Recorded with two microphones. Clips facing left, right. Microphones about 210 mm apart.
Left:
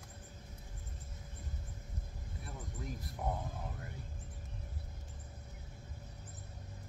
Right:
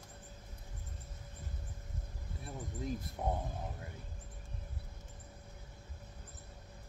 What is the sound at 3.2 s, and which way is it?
Speech, 25° right (ahead or behind).